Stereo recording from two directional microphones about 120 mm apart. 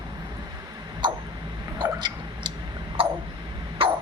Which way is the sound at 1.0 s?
40° right (ahead or behind).